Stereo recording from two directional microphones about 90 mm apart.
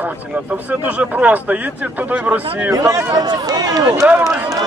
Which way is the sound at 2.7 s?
35° right (ahead or behind).